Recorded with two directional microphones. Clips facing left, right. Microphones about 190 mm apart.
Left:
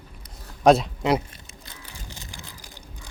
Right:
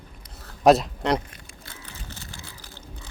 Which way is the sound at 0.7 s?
Centre (ahead or behind).